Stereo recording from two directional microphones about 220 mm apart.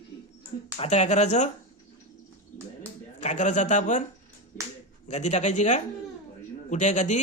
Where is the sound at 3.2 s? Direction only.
35° left (ahead or behind).